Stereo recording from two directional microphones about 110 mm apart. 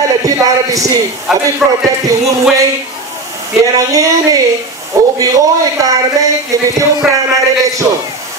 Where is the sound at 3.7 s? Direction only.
30° right (ahead or behind).